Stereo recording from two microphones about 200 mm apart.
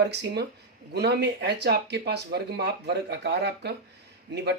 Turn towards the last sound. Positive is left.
turn(degrees=-55)  # may be behind; listen again after turning